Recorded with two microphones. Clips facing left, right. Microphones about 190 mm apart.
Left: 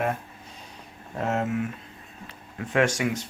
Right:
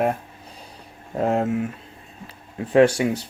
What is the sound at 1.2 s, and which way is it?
Speech, 30° right (ahead or behind).